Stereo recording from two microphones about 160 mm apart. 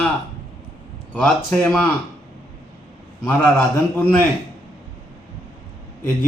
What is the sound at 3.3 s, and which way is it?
Speech, 10° left (ahead or behind).